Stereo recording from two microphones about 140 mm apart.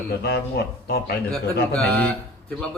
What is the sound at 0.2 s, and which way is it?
Speech, 90° left.